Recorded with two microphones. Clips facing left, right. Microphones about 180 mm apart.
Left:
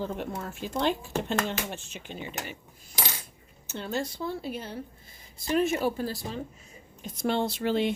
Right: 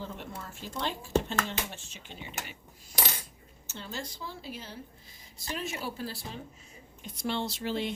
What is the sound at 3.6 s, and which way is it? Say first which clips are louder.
Speech: left 8 dB; 60° left (ahead or behind).